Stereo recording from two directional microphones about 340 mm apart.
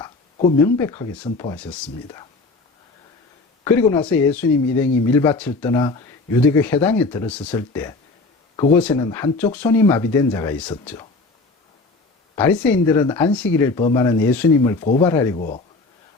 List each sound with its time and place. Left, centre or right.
0.0 s speech: centre
3.6 s speech: centre
12.4 s speech: centre
15.4 s speech: left